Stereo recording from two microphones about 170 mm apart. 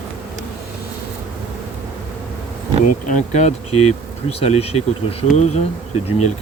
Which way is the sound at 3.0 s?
45° left (ahead or behind).